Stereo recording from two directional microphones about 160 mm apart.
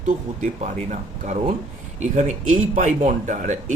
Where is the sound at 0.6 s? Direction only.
50° right (ahead or behind).